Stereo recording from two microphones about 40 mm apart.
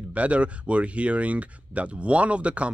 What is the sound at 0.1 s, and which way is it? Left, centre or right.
Speech, right.